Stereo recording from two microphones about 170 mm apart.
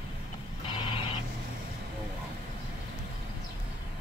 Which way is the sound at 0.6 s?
30° left (ahead or behind).